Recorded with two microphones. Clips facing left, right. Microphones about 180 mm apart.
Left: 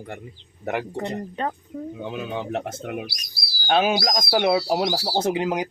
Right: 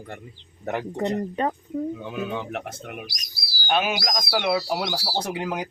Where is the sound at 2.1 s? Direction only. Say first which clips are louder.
Left 1 dB; 25° left (ahead or behind).